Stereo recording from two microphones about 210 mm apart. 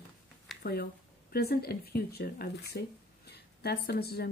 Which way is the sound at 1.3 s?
50° left (ahead or behind).